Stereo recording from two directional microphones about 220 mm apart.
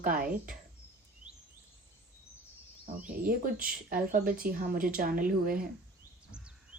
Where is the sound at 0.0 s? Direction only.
40° right (ahead or behind).